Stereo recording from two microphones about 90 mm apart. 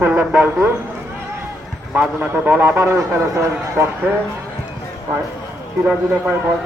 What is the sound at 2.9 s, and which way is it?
Speech, 35° right (ahead or behind).